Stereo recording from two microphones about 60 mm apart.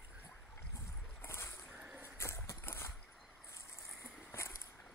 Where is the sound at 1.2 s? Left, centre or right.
Left.